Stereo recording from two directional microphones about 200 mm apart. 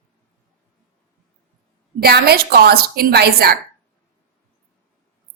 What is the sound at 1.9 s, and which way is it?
A woman's voice, 50° right (ahead or behind).